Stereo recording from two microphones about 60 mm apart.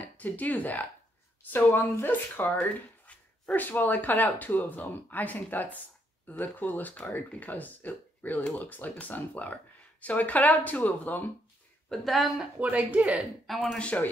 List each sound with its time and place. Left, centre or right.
0.0 s speech: left
1.5 s speech: left
11.9 s speech: centre
12.5 s speech: right
13.1 s speech: centre
13.7 s speech: left